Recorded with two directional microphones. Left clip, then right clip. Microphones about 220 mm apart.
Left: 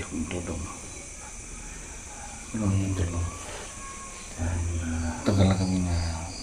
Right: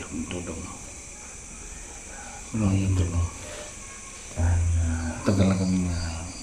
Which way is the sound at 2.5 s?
5° right (ahead or behind).